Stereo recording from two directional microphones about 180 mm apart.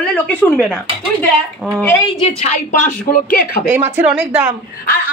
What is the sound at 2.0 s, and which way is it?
Speech, 30° left (ahead or behind).